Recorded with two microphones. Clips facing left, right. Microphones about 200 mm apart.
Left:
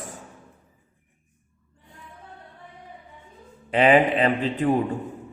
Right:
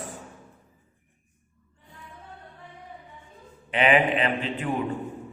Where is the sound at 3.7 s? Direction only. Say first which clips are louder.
Left 4 dB; 40° left (ahead or behind).